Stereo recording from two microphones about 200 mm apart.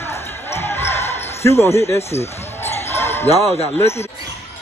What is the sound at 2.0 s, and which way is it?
Speech, 30° left (ahead or behind).